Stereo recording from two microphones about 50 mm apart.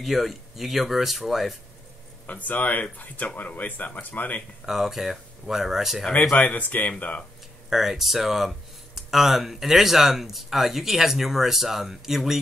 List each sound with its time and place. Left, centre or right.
0.0 s speech: centre
2.2 s speech: left
4.6 s speech: centre
6.3 s speech: left
7.7 s speech: centre